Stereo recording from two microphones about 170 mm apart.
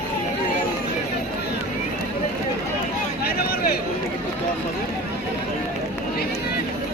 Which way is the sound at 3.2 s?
65° left (ahead or behind).